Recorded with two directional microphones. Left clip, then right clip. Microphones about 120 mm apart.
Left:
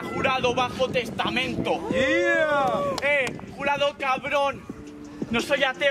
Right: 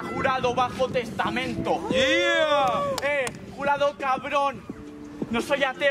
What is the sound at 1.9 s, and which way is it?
Speech, 20° right (ahead or behind).